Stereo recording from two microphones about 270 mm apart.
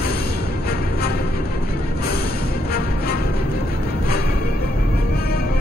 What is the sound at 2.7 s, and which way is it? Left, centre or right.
Music, left.